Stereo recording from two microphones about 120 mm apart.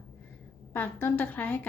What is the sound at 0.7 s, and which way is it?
Speech, 20° left (ahead or behind).